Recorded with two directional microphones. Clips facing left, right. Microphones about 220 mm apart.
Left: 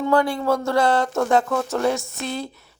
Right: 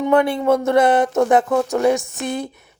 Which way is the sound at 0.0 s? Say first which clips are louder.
Right 3 dB; 20° right (ahead or behind).